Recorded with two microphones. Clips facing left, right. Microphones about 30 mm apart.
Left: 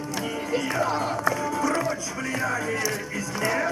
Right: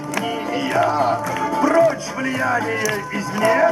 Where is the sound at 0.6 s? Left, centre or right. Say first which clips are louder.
Right 8 dB; right.